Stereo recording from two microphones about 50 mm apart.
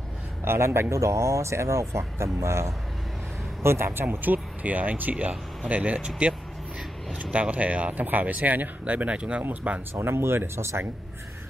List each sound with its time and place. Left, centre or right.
0.5 s speech: right
3.6 s speech: right
9.9 s speech: right